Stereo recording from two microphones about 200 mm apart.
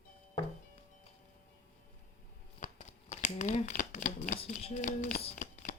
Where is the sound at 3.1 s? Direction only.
35° left (ahead or behind).